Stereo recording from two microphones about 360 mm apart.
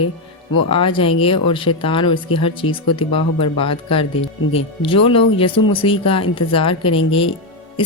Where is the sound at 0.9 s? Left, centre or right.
Centre.